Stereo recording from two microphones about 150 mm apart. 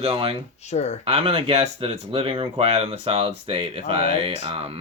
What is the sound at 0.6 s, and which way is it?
Speech, 45° left (ahead or behind).